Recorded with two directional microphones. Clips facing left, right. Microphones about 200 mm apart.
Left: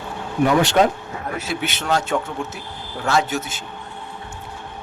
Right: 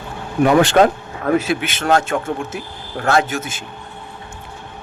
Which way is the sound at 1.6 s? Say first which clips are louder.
Right 5 dB; 50° right (ahead or behind).